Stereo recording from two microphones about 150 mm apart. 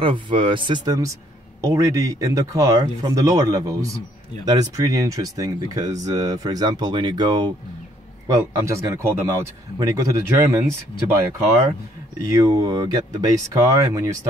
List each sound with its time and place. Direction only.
0.0 s speech: 35° right (ahead or behind)
12.3 s speech: 25° right (ahead or behind)